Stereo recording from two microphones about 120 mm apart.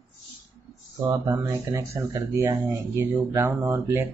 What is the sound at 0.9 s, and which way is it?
Speech, 30° right (ahead or behind).